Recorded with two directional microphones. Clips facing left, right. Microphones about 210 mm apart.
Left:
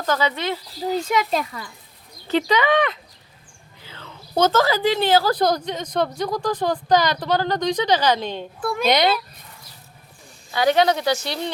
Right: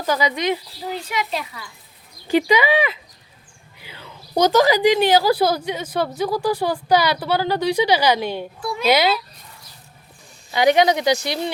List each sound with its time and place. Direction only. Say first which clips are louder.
0.0 s a woman's voice: right 2 dB; 10° right (ahead or behind)
0.9 s a child's voice: left 5 dB; 45° left (ahead or behind)
2.2 s a woman's voice: right 2 dB; 10° right (ahead or behind)
10.5 s a woman's voice: right 2 dB; 15° right (ahead or behind)